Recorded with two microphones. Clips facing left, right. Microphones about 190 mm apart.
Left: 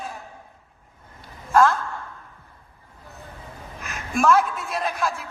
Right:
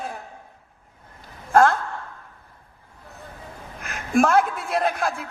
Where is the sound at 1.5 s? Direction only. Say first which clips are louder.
Right 1 dB; 55° right (ahead or behind).